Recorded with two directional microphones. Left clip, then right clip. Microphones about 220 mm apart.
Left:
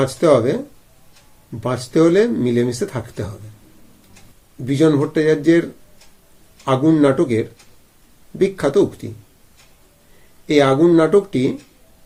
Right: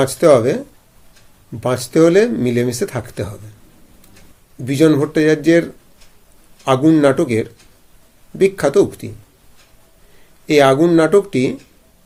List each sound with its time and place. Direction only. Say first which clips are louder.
0.0 s speech: right 3 dB; 30° right (ahead or behind)
1.6 s speech: right 3 dB; 30° right (ahead or behind)
4.6 s speech: right 2 dB; 30° right (ahead or behind)
6.7 s speech: right 2 dB; 30° right (ahead or behind)
10.4 s speech: right 2 dB; 30° right (ahead or behind)